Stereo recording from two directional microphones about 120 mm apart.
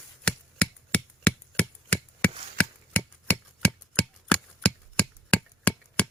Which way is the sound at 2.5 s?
15° left (ahead or behind).